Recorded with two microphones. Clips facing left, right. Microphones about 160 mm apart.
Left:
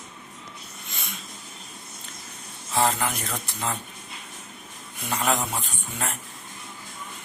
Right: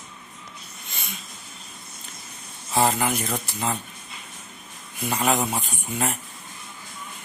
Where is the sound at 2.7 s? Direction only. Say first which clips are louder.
Right 2 dB; 10° right (ahead or behind).